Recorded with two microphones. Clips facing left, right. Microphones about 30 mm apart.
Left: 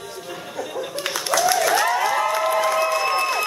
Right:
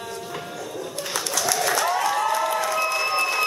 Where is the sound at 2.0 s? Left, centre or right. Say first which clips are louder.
Left 2 dB; centre.